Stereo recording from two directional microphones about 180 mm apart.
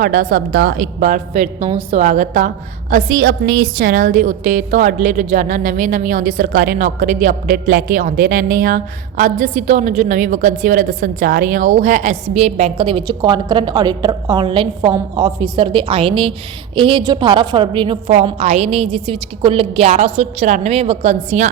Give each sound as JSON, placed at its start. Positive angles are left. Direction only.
{"t": 0.0, "sound": "a woman's voice", "side_deg": -50}
{"t": 2.0, "sound": "a woman's voice", "side_deg": -45}
{"t": 2.9, "sound": "a woman's voice", "side_deg": -60}